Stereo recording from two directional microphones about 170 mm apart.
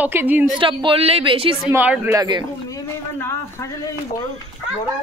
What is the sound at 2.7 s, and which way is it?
Speech, 15° left (ahead or behind).